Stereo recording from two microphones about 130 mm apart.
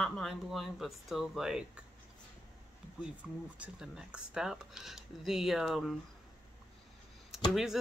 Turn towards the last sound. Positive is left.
turn(degrees=-5)  # may be behind; listen again after turning